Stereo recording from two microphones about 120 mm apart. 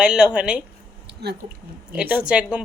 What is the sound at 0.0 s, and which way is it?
Speech, 5° right (ahead or behind).